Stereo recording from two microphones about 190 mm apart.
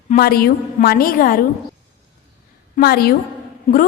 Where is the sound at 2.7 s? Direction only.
55° left (ahead or behind).